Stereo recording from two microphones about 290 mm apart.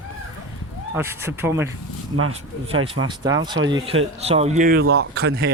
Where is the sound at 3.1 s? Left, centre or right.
Centre; by 5.5 s right.